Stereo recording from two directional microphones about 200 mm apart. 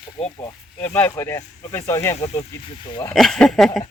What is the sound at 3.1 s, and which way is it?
Speech, centre (ahead or behind).